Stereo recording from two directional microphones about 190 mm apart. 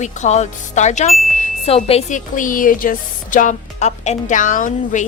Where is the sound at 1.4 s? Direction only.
30° left (ahead or behind).